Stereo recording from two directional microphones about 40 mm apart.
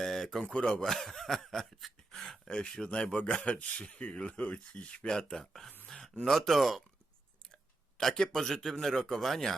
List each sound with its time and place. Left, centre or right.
0.0 s a sound: centre
0.4 s speech: left
0.9 s snicker: centre
2.1 s a sound: centre
2.5 s speech: left
3.4 s speech: left
5.1 s speech: centre
6.2 s snicker: centre
7.5 s a sound: centre
8.8 s speech: centre